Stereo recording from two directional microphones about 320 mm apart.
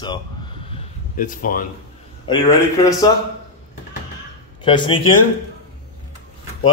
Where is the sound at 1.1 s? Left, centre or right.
Left.